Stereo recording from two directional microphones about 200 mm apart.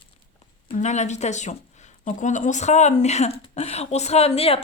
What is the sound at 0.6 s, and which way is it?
Speech, 35° left (ahead or behind).